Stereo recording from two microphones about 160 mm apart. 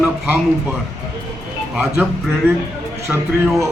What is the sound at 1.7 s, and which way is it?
A man's voice, centre (ahead or behind).